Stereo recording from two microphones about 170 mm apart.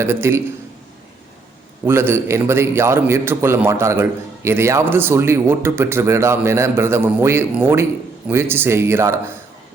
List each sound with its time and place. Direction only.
0.0 s a man's voice: 15° right (ahead or behind)
1.8 s a man's voice: 15° right (ahead or behind)